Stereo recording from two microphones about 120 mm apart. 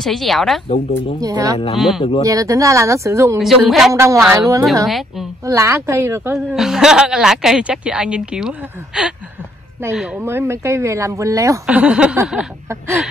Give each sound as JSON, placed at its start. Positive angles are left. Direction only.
{"t": 0.0, "sound": "a woman's voice", "side_deg": 0}
{"t": 0.7, "sound": "speech", "side_deg": 50}
{"t": 1.2, "sound": "speech", "side_deg": -30}
{"t": 1.8, "sound": "a woman's voice", "side_deg": 0}
{"t": 2.2, "sound": "speech", "side_deg": -25}
{"t": 3.3, "sound": "a woman's voice", "side_deg": 0}
{"t": 3.9, "sound": "speech", "side_deg": -25}
{"t": 4.8, "sound": "a woman's voice", "side_deg": 0}
{"t": 5.4, "sound": "speech", "side_deg": -25}
{"t": 6.3, "sound": "a woman's voice", "side_deg": -5}
{"t": 10.1, "sound": "speech", "side_deg": -20}
{"t": 11.6, "sound": "speech", "side_deg": -10}
{"t": 12.6, "sound": "speech", "side_deg": -25}